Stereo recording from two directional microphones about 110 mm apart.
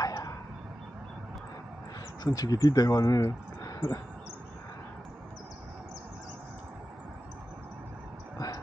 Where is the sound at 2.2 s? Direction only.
35° left (ahead or behind).